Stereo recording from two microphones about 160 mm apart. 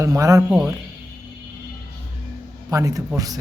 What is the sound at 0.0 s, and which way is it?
Speech, 20° right (ahead or behind).